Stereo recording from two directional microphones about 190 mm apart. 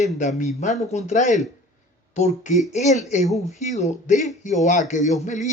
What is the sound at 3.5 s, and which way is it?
Speech, 35° left (ahead or behind).